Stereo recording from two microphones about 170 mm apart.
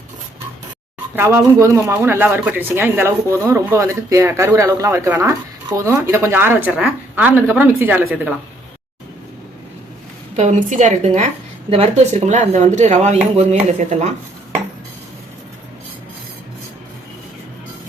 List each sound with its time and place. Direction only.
1.1 s speech: 15° right (ahead or behind)
10.3 s speech: 45° right (ahead or behind)